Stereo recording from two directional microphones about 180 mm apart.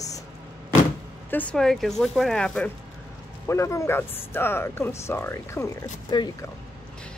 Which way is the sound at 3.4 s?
15° left (ahead or behind).